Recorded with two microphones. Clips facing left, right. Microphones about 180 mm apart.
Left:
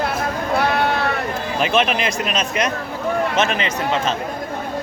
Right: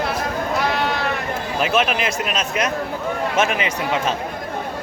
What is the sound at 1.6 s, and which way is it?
Speech, 5° right (ahead or behind).